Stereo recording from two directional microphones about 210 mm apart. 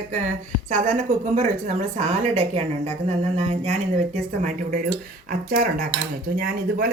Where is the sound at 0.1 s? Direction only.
35° right (ahead or behind).